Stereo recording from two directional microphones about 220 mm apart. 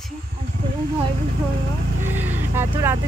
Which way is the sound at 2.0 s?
10° right (ahead or behind).